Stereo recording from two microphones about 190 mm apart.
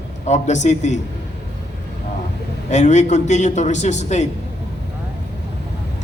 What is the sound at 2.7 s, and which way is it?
A man's voice, 40° left (ahead or behind).